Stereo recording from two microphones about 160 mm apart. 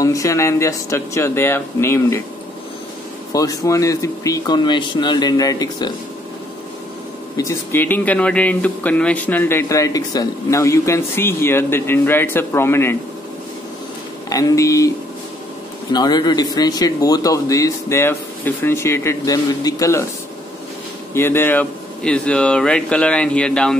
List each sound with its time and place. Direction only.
0.0 s speech: 20° left (ahead or behind)
3.3 s speech: 20° left (ahead or behind)
7.3 s speech: 15° left (ahead or behind)
14.3 s speech: 20° left (ahead or behind)
15.9 s speech: 25° left (ahead or behind)
21.1 s speech: 15° left (ahead or behind)